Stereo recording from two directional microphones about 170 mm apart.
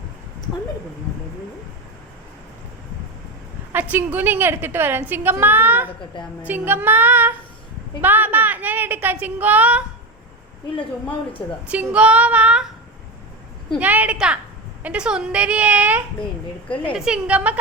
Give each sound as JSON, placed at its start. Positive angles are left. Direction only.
{"t": 3.7, "sound": "a woman's voice", "side_deg": -10}
{"t": 11.7, "sound": "a woman's voice", "side_deg": -5}
{"t": 13.7, "sound": "a woman's voice", "side_deg": -10}
{"t": 17.1, "sound": "a woman's voice", "side_deg": -5}